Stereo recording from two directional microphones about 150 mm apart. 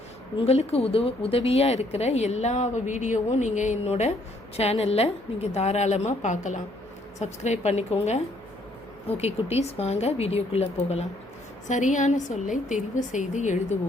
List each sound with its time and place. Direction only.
0.3 s speech: 40° left (ahead or behind)
11.7 s a woman's voice: 55° left (ahead or behind)